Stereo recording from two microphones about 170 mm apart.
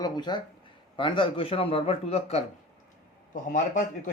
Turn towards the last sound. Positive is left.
turn(degrees=50)  # may be behind; listen again after turning